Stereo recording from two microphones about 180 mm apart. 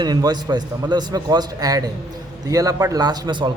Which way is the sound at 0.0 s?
20° right (ahead or behind).